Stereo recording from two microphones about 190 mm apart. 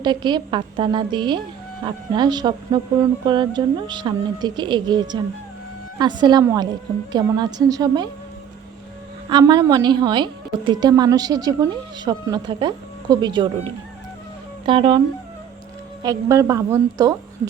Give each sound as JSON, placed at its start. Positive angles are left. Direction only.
{"t": 0.0, "sound": "a woman's voice", "side_deg": -25}
{"t": 9.3, "sound": "a woman's voice", "side_deg": -20}
{"t": 16.0, "sound": "a woman's voice", "side_deg": -15}